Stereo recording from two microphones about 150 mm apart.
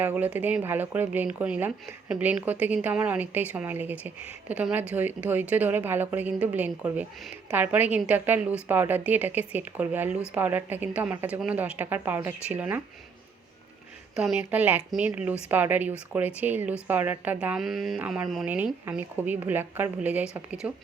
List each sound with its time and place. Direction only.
0.0 s speech: 10° right (ahead or behind)
14.2 s speech: 10° right (ahead or behind)